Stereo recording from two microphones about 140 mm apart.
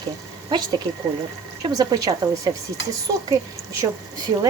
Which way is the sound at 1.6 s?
30° right (ahead or behind).